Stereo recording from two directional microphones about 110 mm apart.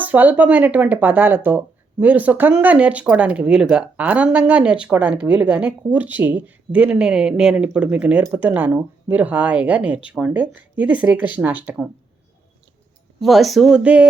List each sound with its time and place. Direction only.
0.0 s speech: 15° right (ahead or behind)
13.1 s speech: centre (ahead or behind)